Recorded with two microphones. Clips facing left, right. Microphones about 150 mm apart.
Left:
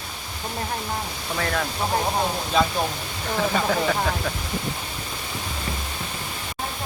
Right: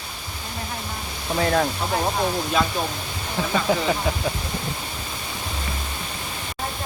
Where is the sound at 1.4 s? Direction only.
30° right (ahead or behind).